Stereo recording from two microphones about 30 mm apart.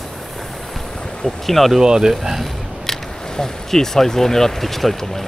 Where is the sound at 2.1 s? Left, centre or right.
Centre.